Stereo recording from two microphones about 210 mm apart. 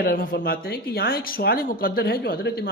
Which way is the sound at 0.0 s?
45° left (ahead or behind).